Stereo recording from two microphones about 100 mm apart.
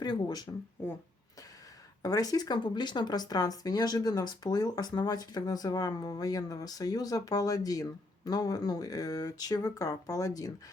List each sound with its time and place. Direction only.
0.0 s speech: 45° left (ahead or behind)
2.0 s speech: 40° left (ahead or behind)